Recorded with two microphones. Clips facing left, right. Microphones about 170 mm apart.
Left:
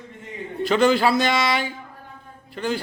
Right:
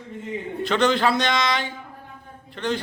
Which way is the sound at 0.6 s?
5° left (ahead or behind).